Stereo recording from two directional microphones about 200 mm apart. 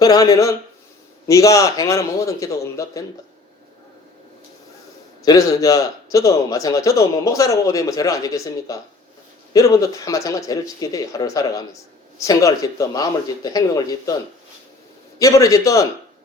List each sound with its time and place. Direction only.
0.0 s speech: 20° left (ahead or behind)
5.2 s speech: 15° left (ahead or behind)
15.2 s speech: 15° left (ahead or behind)